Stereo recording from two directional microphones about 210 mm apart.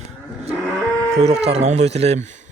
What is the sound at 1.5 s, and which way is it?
Speech, 30° right (ahead or behind).